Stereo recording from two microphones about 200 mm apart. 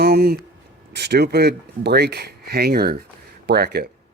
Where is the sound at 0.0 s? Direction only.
50° right (ahead or behind).